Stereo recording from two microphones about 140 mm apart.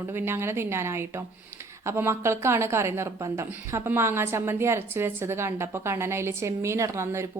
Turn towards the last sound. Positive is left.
turn(degrees=-20)  # may be behind; listen again after turning